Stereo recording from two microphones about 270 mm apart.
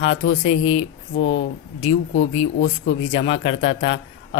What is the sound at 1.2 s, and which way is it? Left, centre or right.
Speech, left.